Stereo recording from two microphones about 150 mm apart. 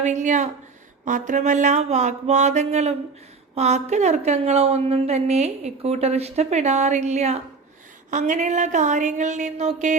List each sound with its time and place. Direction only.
0.0 s a woman's voice: 55° right (ahead or behind)